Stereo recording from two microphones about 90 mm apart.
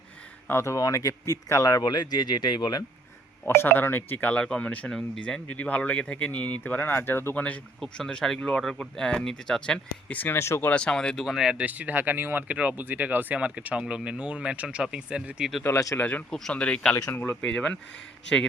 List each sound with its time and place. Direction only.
0.4 s speech: 30° left (ahead or behind); by 2.8 s 50° left (ahead or behind)
3.4 s speech: 25° left (ahead or behind); by 5.4 s 5° left (ahead or behind)
5.5 s speech: 15° left (ahead or behind)
10.7 s speech: 10° left (ahead or behind)
11.3 s speech: 5° right (ahead or behind)
11.5 s speech: 15° right (ahead or behind)
15.6 s speech: 35° left (ahead or behind)
16.0 s speech: 15° left (ahead or behind)
16.9 s speech: 25° left (ahead or behind)